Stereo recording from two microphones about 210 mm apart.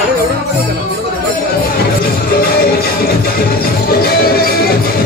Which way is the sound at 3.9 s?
45° left (ahead or behind).